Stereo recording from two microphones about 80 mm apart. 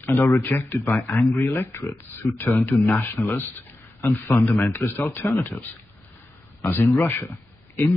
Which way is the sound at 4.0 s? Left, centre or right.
Left.